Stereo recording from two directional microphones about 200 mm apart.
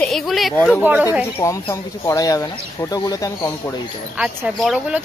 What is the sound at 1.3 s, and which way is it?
Speech, 15° left (ahead or behind).